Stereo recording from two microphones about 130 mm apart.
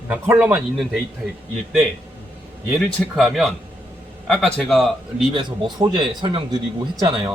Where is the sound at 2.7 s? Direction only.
Centre (ahead or behind).